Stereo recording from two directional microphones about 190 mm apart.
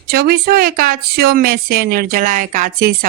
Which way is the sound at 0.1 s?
55° right (ahead or behind).